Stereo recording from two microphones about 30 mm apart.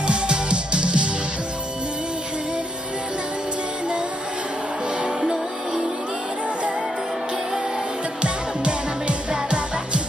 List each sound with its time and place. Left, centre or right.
0.0 s music: right
8.2 s music: right